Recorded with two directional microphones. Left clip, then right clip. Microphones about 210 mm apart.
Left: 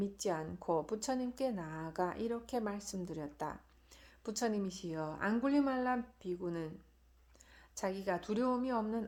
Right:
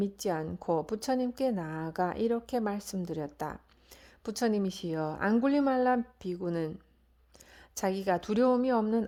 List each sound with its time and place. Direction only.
0.0 s a woman's voice: 35° right (ahead or behind)
7.8 s a woman's voice: 40° right (ahead or behind)